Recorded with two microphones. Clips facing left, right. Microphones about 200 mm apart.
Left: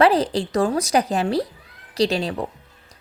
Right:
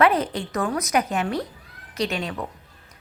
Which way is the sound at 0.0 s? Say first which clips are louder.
Left 3 dB; 35° left (ahead or behind).